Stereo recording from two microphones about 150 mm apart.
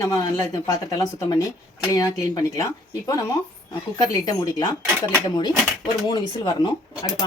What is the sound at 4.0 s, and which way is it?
Speech, 25° left (ahead or behind).